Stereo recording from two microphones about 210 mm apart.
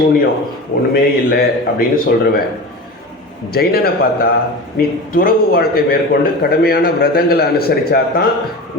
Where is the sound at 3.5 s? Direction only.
45° left (ahead or behind).